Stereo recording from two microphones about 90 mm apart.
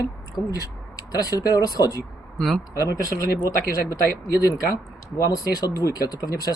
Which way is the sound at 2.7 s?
40° left (ahead or behind).